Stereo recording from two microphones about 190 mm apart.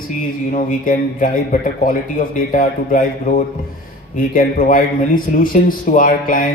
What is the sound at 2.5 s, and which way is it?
A man's voice, 45° left (ahead or behind).